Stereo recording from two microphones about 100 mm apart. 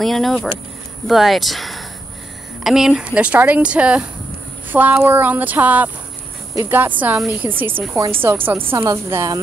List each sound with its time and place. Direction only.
0.0 s speech: centre (ahead or behind); by 8.7 s 20° right (ahead or behind)
8.7 s a woman's voice: 30° right (ahead or behind)